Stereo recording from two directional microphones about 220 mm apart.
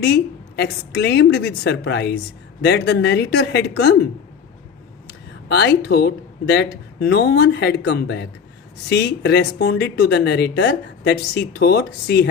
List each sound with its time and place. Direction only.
0.0 s a woman's voice: 50° left (ahead or behind)
5.5 s a woman's voice: 50° left (ahead or behind)